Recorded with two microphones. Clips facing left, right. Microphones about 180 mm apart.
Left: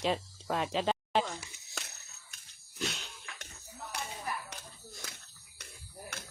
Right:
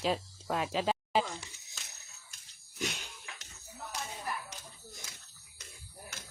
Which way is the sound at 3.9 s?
60° left (ahead or behind).